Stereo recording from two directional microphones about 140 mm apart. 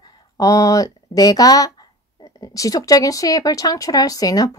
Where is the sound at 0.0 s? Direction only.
25° left (ahead or behind).